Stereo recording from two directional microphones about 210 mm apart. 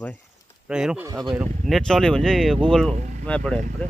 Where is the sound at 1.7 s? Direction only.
Centre (ahead or behind).